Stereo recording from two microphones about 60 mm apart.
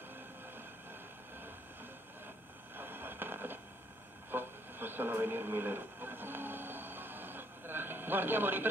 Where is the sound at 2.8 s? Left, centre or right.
Right.